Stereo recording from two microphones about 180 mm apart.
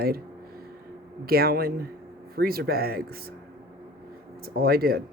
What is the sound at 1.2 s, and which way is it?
Speech, 60° right (ahead or behind).